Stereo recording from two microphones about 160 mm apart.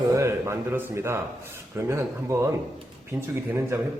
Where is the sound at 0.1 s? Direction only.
15° right (ahead or behind).